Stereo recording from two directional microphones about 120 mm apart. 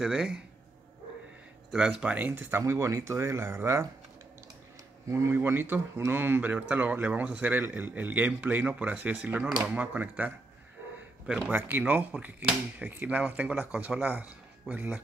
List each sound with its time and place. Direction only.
0.0 s a man's voice: 5° right (ahead or behind)
1.7 s speech: 5° right (ahead or behind); by 3.8 s 20° right (ahead or behind)
5.1 s speech: 20° right (ahead or behind)